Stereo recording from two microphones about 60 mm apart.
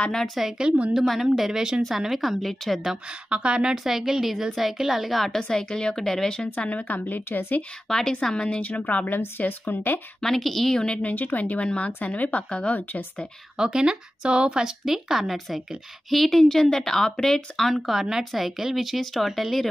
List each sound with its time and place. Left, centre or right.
0.1 s speech: centre
0.4 s a woman's voice: centre
1.2 s a woman's voice: centre
3.3 s a woman's voice: centre
3.7 s speech: centre
5.4 s speech: centre
6.6 s a woman's voice: left
7.9 s a woman's voice: centre; by 9.9 s left
10.2 s a woman's voice: centre; by 13.3 s left
13.6 s speech: centre